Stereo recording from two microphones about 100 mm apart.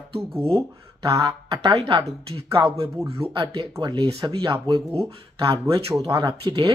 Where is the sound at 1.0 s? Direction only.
35° right (ahead or behind).